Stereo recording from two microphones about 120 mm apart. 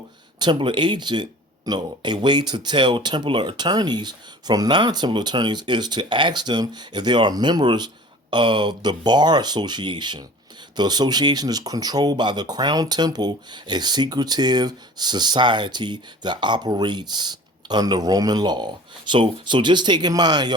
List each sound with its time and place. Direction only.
0.3 s speech: 40° right (ahead or behind)